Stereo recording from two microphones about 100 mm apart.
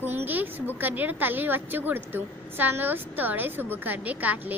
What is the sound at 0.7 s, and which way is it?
Speech, 20° right (ahead or behind).